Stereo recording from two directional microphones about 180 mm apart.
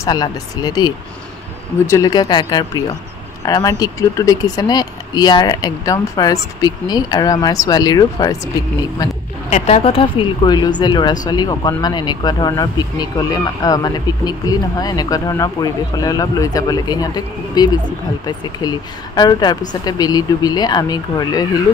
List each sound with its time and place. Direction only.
0.0 s speech: 20° left (ahead or behind)
9.5 s speech: 35° left (ahead or behind)